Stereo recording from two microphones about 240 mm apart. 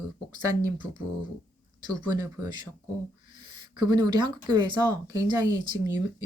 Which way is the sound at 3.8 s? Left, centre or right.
Centre.